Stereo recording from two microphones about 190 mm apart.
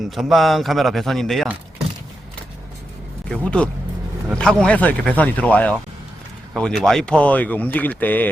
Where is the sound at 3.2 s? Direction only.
5° left (ahead or behind).